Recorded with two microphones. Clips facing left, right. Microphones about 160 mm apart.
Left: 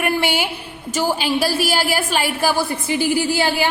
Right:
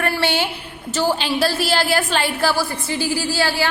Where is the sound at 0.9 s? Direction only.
10° left (ahead or behind).